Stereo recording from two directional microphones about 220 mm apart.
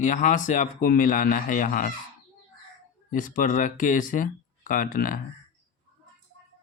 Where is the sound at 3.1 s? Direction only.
40° left (ahead or behind).